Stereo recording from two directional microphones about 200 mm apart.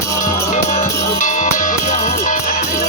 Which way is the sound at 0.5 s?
35° left (ahead or behind).